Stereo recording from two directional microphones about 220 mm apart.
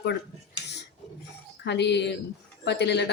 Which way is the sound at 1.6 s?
50° left (ahead or behind).